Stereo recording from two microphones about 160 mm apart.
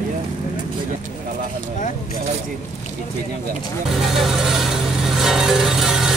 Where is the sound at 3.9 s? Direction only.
Centre (ahead or behind).